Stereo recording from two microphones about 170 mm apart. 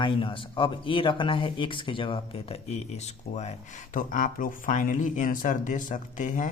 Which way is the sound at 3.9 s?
50° left (ahead or behind).